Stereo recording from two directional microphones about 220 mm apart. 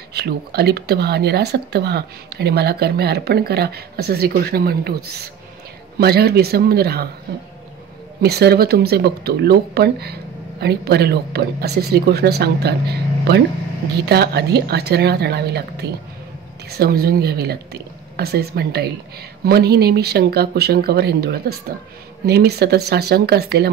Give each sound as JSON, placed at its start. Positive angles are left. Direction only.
{"t": 0.1, "sound": "speech", "side_deg": -45}
{"t": 8.2, "sound": "speech", "side_deg": -45}
{"t": 13.9, "sound": "speech", "side_deg": -45}